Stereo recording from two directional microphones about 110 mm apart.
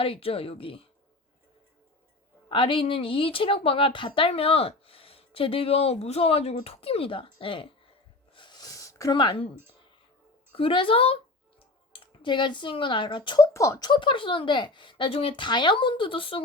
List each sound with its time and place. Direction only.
0.0 s a woman's voice: 55° left (ahead or behind)
2.5 s a woman's voice: 50° left (ahead or behind)
8.3 s a sound: 45° left (ahead or behind); by 9.1 s 30° left (ahead or behind)
9.1 s speech: 45° left (ahead or behind)
10.5 s a woman's voice: 55° left (ahead or behind)
11.9 s speech: 45° left (ahead or behind)
13.4 s speech: 30° left (ahead or behind); by 16.4 s 50° left (ahead or behind)